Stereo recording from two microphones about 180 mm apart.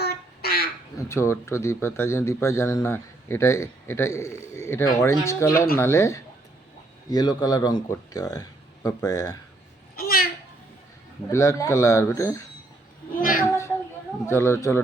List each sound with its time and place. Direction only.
0.0 s a sound: 60° left (ahead or behind)
0.9 s a man's voice: 15° left (ahead or behind)
9.9 s a sound: 55° left (ahead or behind)
11.3 s a man's voice: 15° left (ahead or behind)
13.1 s a woman's voice: 50° left (ahead or behind)
14.3 s a man's voice: 15° left (ahead or behind)